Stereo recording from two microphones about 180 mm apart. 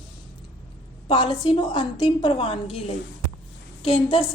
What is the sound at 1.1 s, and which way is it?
A woman's voice, 25° left (ahead or behind).